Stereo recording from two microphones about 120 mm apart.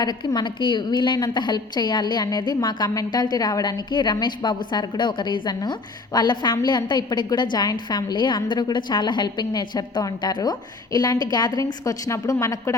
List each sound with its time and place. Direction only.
0.0 s a woman's voice: 35° left (ahead or behind)